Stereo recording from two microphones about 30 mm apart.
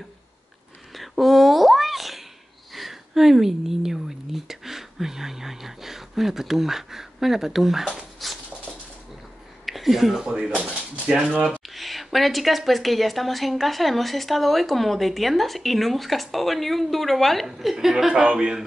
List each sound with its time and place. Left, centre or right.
0.9 s speech: centre
8.2 s a sound: centre
9.7 s speech: centre
10.5 s speech: right
11.6 s a woman's voice: centre
17.7 s speech: centre
18.3 s speech: right